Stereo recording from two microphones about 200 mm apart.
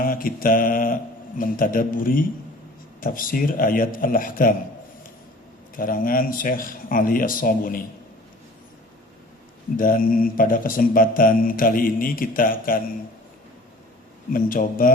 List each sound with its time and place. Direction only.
0.0 s mantra: 45° left (ahead or behind)
1.4 s speech: 45° left (ahead or behind)
5.7 s speech: 45° left (ahead or behind)
9.7 s speech: 45° left (ahead or behind)
14.3 s speech: 45° left (ahead or behind)